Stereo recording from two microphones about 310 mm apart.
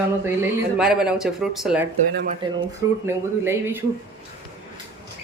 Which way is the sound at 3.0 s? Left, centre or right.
Centre.